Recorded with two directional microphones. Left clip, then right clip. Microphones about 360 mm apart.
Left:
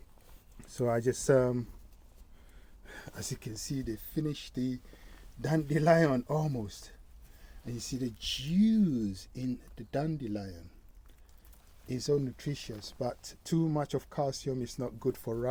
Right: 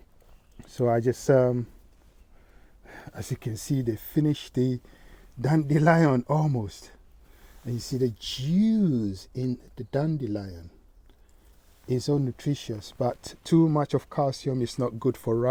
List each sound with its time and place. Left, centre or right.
0.6 s speech: right
2.8 s speech: right
5.4 s speech: right
11.9 s speech: right